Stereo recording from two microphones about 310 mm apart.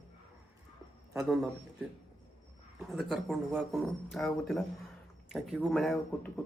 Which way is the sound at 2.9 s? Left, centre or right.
Centre.